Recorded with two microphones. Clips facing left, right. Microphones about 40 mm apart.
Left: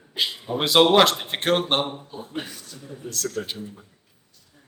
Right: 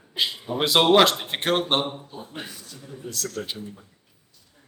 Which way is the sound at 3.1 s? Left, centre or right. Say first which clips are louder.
Left 3 dB; left.